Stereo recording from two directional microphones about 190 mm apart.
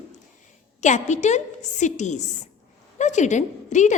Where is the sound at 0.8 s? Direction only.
40° left (ahead or behind).